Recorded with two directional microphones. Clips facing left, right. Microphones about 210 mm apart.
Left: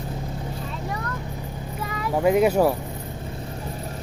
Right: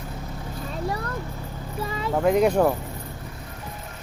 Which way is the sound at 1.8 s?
25° right (ahead or behind).